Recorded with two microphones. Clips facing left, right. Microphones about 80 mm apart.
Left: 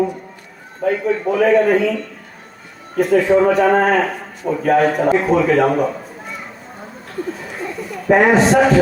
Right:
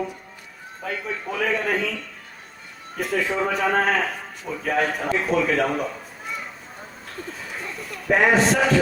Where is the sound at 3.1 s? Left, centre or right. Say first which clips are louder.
Left 11 dB; left.